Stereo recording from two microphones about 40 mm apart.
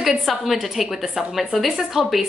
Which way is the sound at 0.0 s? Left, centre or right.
Centre.